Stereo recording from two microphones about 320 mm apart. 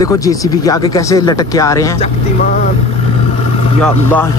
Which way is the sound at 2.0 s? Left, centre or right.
Left.